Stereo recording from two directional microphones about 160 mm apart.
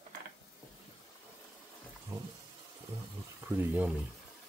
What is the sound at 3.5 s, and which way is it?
Speech, 10° right (ahead or behind).